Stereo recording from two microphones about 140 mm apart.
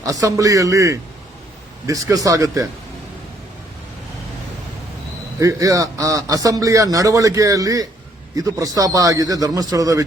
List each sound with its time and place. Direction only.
0.0 s a man's voice: 25° right (ahead or behind)
5.4 s a man's voice: 25° right (ahead or behind)